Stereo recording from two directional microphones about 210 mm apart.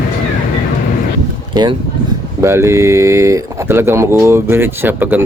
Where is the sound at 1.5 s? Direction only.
20° right (ahead or behind).